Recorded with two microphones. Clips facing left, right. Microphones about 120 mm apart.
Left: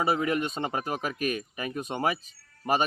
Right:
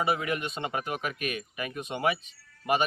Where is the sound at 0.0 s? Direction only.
35° left (ahead or behind).